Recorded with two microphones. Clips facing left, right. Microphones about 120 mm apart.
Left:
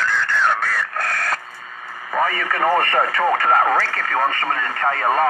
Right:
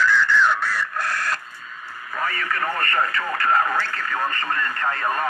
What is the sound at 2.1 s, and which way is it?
Speech, 85° left.